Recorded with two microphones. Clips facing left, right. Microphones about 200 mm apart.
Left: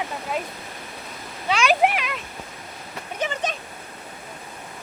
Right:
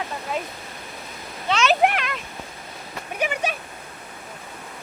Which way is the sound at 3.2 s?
10° right (ahead or behind).